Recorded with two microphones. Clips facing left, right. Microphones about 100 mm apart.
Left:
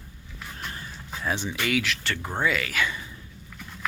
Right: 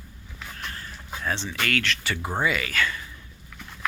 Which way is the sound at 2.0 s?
10° right (ahead or behind).